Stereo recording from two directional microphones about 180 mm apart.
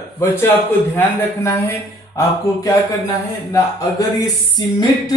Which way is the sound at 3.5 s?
20° left (ahead or behind).